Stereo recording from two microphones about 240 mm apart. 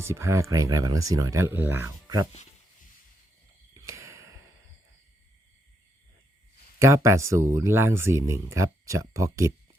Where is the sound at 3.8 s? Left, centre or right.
Centre.